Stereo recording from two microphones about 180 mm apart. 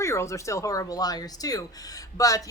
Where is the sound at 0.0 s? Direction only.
15° left (ahead or behind).